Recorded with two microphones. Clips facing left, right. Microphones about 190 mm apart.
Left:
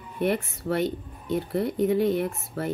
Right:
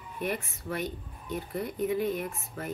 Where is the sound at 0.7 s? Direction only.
80° left.